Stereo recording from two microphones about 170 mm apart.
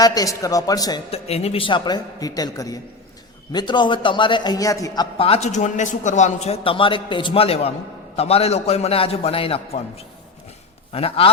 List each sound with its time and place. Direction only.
0.0 s a man's voice: 20° left (ahead or behind)
1.1 s a man's voice: 35° left (ahead or behind); by 5.0 s 20° left (ahead or behind)
5.1 s a man's voice: 35° left (ahead or behind)
10.9 s a man's voice: 35° left (ahead or behind)